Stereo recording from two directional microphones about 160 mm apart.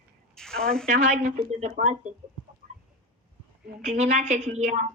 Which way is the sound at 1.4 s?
50° right (ahead or behind).